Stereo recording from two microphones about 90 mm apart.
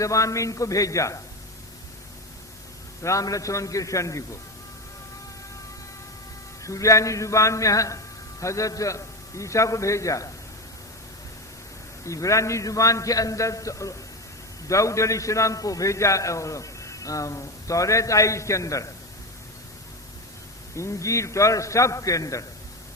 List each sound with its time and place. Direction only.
0.0 s a man's voice: 35° left (ahead or behind)
3.0 s a man's voice: 35° left (ahead or behind)
6.6 s a man's voice: 35° left (ahead or behind)
12.0 s a man's voice: 35° left (ahead or behind)
20.7 s a man's voice: 35° left (ahead or behind)